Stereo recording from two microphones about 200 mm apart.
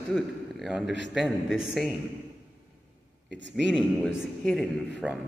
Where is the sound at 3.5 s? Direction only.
Centre (ahead or behind).